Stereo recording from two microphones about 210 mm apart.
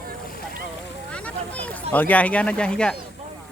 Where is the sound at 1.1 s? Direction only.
5° left (ahead or behind).